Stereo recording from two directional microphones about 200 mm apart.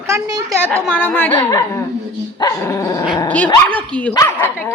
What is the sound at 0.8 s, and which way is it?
A woman's voice, 5° left (ahead or behind).